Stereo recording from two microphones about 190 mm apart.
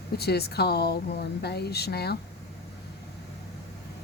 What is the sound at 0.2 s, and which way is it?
Speech, 55° left (ahead or behind).